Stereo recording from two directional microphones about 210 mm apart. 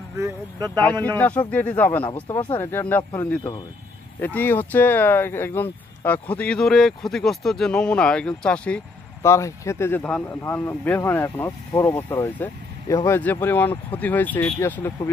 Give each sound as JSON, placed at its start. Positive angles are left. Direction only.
{"t": 1.0, "sound": "speech", "side_deg": 10}
{"t": 3.0, "sound": "speech", "side_deg": 20}